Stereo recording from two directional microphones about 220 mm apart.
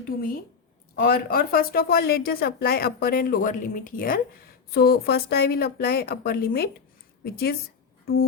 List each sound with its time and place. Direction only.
0.1 s a woman's voice: 40° left (ahead or behind)
8.0 s music: 45° left (ahead or behind)